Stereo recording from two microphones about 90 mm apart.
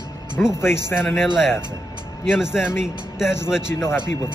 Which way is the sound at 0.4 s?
10° left (ahead or behind).